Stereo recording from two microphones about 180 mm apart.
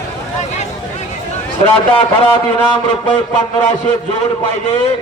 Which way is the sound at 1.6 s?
30° left (ahead or behind).